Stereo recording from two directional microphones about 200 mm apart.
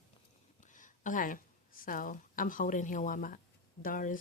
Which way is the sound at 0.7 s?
40° left (ahead or behind).